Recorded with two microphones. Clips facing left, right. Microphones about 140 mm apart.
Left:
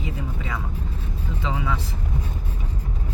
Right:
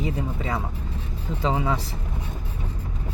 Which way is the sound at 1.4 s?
35° right (ahead or behind).